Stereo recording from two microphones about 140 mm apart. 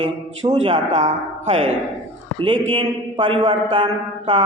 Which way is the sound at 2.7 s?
35° right (ahead or behind).